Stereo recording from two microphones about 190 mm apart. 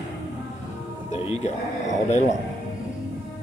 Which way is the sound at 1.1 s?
35° left (ahead or behind).